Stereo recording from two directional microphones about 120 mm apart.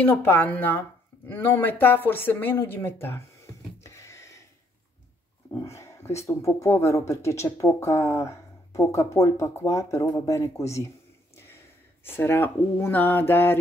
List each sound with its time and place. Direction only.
0.0 s speech: 15° left (ahead or behind)
3.8 s a sound: 25° left (ahead or behind)
5.5 s speech: 25° left (ahead or behind)
12.0 s speech: 20° left (ahead or behind)